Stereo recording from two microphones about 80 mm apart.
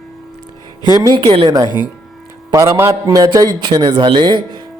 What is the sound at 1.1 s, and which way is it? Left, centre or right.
Speech, right.